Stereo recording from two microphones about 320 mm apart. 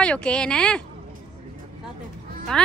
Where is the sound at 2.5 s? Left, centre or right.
Centre.